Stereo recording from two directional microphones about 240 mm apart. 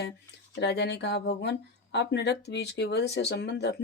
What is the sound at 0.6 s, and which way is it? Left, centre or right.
Speech, left.